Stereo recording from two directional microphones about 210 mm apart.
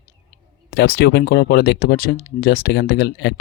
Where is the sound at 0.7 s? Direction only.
45° left (ahead or behind).